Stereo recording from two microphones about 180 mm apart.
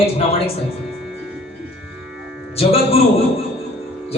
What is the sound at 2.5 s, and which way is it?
Speech, 35° left (ahead or behind).